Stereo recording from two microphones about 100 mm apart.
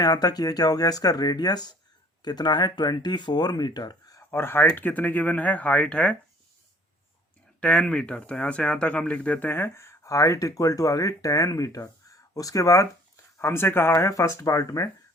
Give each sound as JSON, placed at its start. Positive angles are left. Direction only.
{"t": 0.0, "sound": "speech", "side_deg": 40}
{"t": 4.2, "sound": "speech", "side_deg": 25}
{"t": 7.6, "sound": "speech", "side_deg": 10}